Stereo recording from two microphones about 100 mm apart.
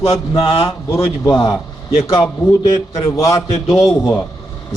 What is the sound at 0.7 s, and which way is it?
Speech, 30° left (ahead or behind).